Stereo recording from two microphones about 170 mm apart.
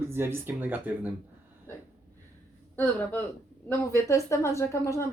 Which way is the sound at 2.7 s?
10° left (ahead or behind).